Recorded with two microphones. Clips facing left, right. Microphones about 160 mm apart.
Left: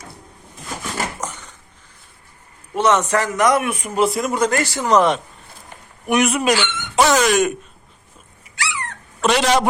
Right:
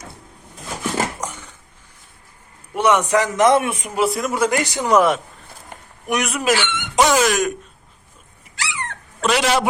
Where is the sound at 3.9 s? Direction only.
Centre (ahead or behind).